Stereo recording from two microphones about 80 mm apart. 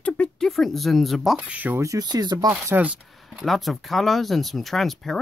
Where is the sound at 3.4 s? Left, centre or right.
Centre.